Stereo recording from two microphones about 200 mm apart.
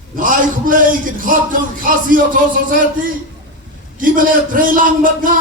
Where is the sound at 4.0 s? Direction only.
45° right (ahead or behind).